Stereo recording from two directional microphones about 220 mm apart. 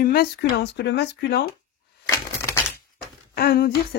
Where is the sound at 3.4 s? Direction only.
45° left (ahead or behind).